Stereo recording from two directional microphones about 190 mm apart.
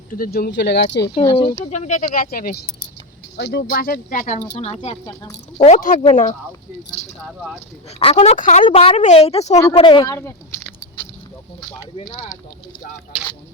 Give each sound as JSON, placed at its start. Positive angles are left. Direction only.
{"t": 0.1, "sound": "speech", "side_deg": 50}
{"t": 1.1, "sound": "speech", "side_deg": 30}
{"t": 2.3, "sound": "speech", "side_deg": 50}
{"t": 3.3, "sound": "speech", "side_deg": 60}
{"t": 4.5, "sound": "speech", "side_deg": 35}
{"t": 5.0, "sound": "speech", "side_deg": 20}
{"t": 5.6, "sound": "speech", "side_deg": 40}
{"t": 7.3, "sound": "speech", "side_deg": 0}
{"t": 7.9, "sound": "speech", "side_deg": 30}